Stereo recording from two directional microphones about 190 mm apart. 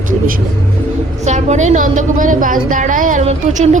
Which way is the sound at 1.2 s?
40° right (ahead or behind).